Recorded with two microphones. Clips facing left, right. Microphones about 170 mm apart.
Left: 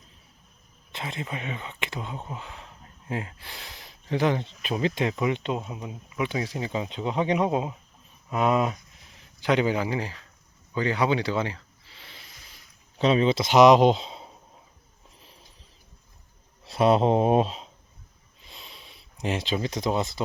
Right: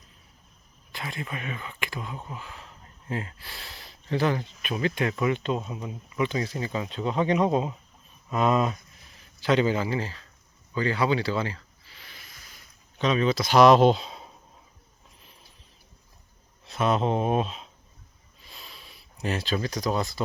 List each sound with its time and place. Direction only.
0.9 s speech: 25° left (ahead or behind)
4.4 s a man's voice: 30° left (ahead or behind)
10.8 s a sound: 20° left (ahead or behind)
13.0 s speech: 30° left (ahead or behind)
16.6 s speech: 30° left (ahead or behind)
18.4 s a sound: 20° left (ahead or behind)